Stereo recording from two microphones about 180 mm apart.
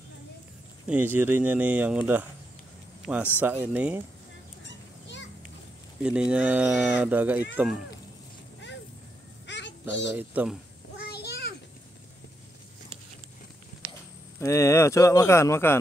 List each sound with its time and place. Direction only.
0.8 s speech: 10° right (ahead or behind)
3.3 s speech: 10° right (ahead or behind)
4.6 s children playing: 85° left
6.0 s speech: 5° right (ahead or behind)
9.5 s a sound: 80° left
10.1 s speech: 5° right (ahead or behind)
11.0 s a sound: 65° left (ahead or behind)
14.4 s speech: 15° left (ahead or behind)